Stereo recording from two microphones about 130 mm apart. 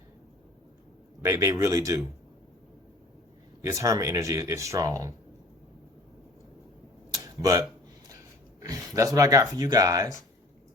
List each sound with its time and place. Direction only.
1.2 s speech: 25° right (ahead or behind)
3.6 s speech: 25° right (ahead or behind)
7.2 s a sound: 25° right (ahead or behind)
8.6 s speech: 25° right (ahead or behind)